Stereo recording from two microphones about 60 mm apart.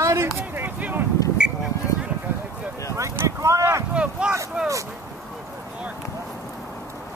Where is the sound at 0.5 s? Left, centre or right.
Right.